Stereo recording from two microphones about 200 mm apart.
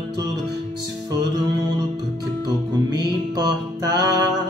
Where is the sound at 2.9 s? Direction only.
20° right (ahead or behind).